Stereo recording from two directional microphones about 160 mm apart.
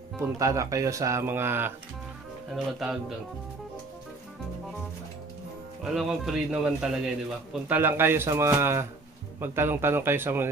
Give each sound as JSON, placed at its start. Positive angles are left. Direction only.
{"t": 0.4, "sound": "speech", "side_deg": -20}
{"t": 2.5, "sound": "speech", "side_deg": 0}
{"t": 5.9, "sound": "a man's voice", "side_deg": -5}